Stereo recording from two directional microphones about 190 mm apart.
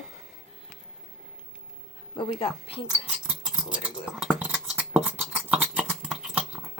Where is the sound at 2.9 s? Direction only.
5° right (ahead or behind).